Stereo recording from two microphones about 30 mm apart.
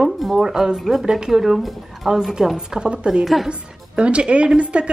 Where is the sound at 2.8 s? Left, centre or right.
Right.